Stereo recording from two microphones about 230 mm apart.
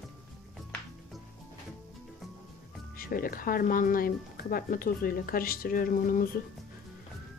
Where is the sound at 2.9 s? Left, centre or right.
Left.